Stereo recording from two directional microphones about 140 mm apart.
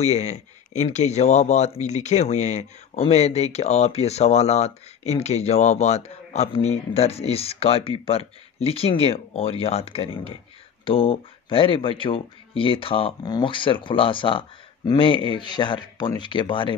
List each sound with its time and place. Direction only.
0.0 s speech: 55° left (ahead or behind); by 16.7 s 35° left (ahead or behind)